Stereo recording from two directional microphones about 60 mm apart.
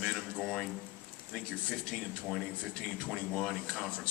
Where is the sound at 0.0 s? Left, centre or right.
Centre.